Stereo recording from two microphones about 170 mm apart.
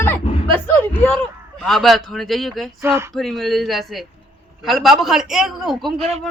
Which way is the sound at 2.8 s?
15° right (ahead or behind).